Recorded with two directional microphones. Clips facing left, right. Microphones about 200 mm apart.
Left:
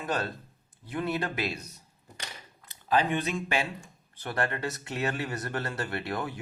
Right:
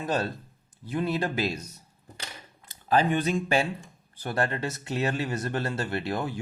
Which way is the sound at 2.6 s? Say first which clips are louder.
Right 3 dB; 40° right (ahead or behind).